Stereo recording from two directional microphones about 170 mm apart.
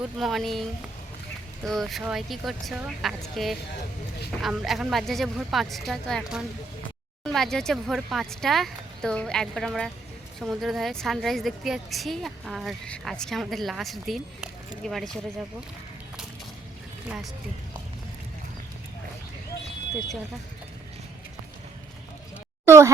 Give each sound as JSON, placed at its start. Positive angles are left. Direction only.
{"t": 0.2, "sound": "a woman's voice", "side_deg": 0}
{"t": 1.6, "sound": "a woman's voice", "side_deg": 0}
{"t": 22.6, "sound": "speech", "side_deg": -15}